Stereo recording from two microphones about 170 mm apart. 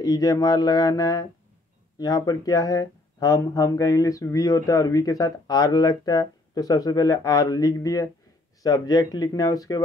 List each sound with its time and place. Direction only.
0.0 s speech: 20° left (ahead or behind)